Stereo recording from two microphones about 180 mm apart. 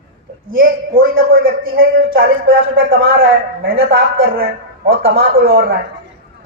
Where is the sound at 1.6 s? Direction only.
75° right (ahead or behind).